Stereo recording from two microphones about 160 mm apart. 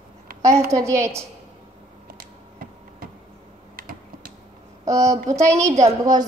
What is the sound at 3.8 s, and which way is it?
Typing, 65° right (ahead or behind).